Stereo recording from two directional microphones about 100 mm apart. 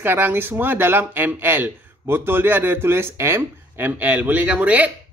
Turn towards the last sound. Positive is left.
turn(degrees=-15)  # may be behind; listen again after turning